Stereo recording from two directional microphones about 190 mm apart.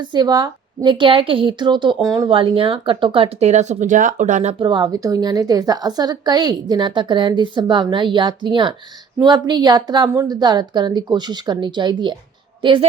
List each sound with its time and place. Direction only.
0.0 s a woman's voice: 20° right (ahead or behind); by 4.5 s 40° right (ahead or behind)
4.6 s a woman's voice: 25° right (ahead or behind)